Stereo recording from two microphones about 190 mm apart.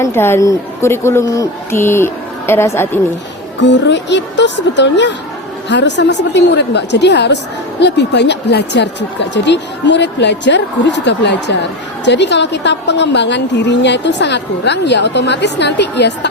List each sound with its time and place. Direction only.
0.0 s speech: 10° left (ahead or behind)
3.6 s a woman's voice: 70° left (ahead or behind)